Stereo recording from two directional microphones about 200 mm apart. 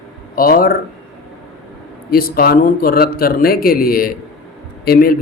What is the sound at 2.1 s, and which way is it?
Speech, 50° left (ahead or behind).